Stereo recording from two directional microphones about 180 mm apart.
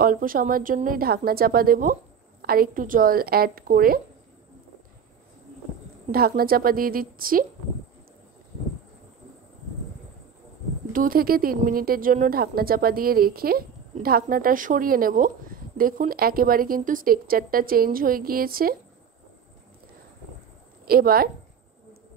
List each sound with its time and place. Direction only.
0.0 s a woman's voice: 50° right (ahead or behind)
6.1 s a woman's voice: 55° right (ahead or behind)
10.9 s a woman's voice: 50° right (ahead or behind)
20.8 s a woman's voice: 55° right (ahead or behind)